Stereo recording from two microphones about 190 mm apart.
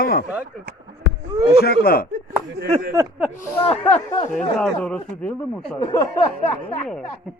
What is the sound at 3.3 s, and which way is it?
Speech, 35° left (ahead or behind).